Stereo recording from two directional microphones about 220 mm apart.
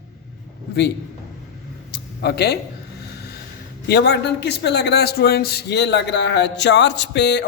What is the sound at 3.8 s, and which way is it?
A man's voice, 50° left (ahead or behind).